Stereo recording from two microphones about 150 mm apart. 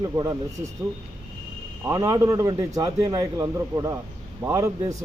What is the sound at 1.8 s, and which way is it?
Speech, 20° right (ahead or behind).